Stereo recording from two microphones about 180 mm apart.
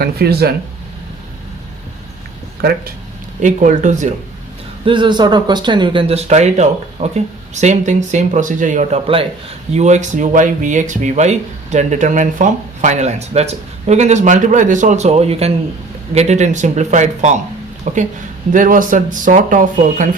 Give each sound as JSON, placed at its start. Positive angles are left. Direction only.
{"t": 0.0, "sound": "speech", "side_deg": -60}
{"t": 2.6, "sound": "speech", "side_deg": -60}
{"t": 3.4, "sound": "speech", "side_deg": -45}
{"t": 4.9, "sound": "speech", "side_deg": -25}